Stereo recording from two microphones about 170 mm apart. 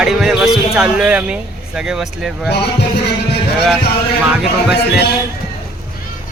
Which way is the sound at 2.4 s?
80° left.